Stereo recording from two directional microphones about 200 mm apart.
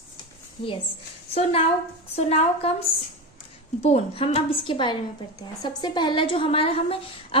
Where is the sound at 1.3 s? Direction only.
30° left (ahead or behind).